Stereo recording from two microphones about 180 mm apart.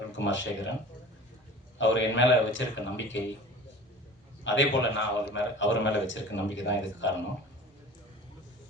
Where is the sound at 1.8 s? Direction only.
90° left.